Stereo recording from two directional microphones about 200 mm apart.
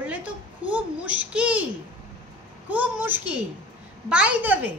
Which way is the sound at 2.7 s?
10° right (ahead or behind).